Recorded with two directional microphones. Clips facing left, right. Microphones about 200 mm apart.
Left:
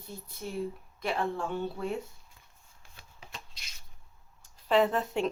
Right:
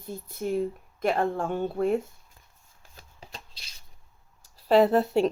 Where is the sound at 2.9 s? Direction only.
35° right (ahead or behind).